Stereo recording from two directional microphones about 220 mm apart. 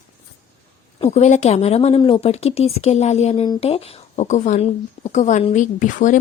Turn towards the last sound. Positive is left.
turn(degrees=35)  # may be behind; listen again after turning